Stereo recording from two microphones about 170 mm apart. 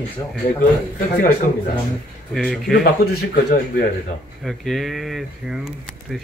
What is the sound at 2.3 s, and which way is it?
Speech, centre (ahead or behind).